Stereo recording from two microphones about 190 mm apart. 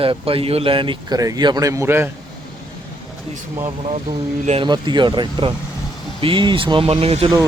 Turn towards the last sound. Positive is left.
turn(degrees=-30)  # may be behind; listen again after turning